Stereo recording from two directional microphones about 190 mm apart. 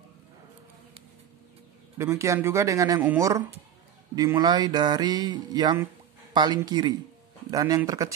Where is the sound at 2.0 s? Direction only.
15° right (ahead or behind).